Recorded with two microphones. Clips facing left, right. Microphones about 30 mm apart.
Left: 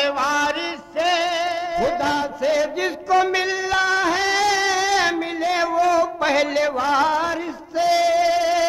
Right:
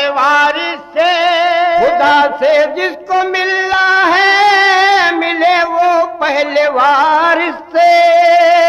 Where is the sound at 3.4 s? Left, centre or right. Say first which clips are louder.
Right 8 dB; right.